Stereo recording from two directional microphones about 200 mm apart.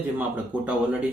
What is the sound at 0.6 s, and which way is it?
Speech, 5° right (ahead or behind).